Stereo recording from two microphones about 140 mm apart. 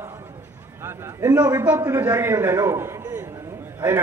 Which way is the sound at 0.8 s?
15° right (ahead or behind).